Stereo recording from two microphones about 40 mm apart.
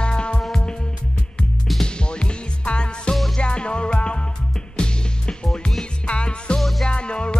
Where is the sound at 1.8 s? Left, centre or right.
Left.